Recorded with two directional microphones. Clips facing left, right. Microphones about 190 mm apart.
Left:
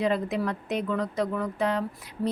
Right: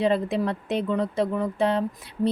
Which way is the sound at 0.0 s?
30° right (ahead or behind).